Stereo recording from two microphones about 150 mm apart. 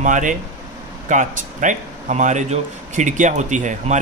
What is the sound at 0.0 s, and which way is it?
Speech, 60° right (ahead or behind).